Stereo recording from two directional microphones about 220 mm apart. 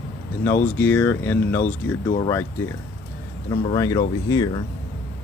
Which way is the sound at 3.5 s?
15° left (ahead or behind).